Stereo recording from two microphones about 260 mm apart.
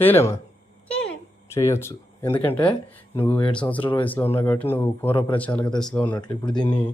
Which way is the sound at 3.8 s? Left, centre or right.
Centre.